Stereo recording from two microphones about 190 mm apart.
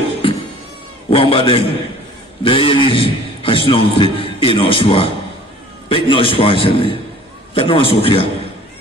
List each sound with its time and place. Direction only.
0.2 s cat: 25° left (ahead or behind)
1.1 s a man's voice: 30° left (ahead or behind)